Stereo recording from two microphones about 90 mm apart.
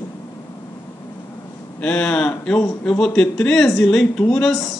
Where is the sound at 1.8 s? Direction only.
10° left (ahead or behind).